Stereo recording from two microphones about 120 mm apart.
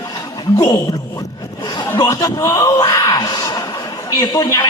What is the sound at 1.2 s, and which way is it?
Zipper, 35° left (ahead or behind).